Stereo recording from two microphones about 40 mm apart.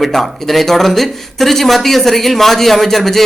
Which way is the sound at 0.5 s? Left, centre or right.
Centre.